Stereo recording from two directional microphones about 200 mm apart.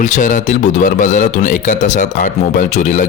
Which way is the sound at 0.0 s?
40° left (ahead or behind).